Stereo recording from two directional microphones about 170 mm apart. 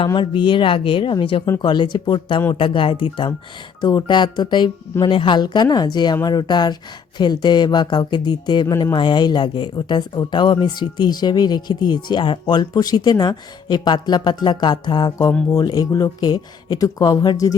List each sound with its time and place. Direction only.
0.0 s speech: 30° left (ahead or behind)